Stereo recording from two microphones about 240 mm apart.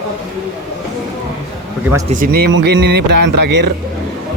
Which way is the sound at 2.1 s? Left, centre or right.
Right.